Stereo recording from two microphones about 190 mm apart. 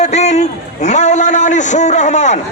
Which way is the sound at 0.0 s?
35° left (ahead or behind).